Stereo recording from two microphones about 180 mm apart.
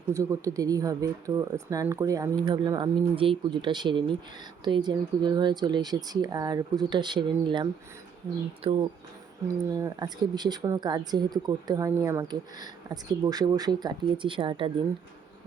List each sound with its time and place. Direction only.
0.1 s speech: 15° right (ahead or behind); by 8.8 s 35° right (ahead or behind)
9.5 s speech: 20° right (ahead or behind)